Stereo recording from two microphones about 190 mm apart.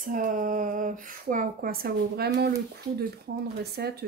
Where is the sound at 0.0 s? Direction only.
45° right (ahead or behind).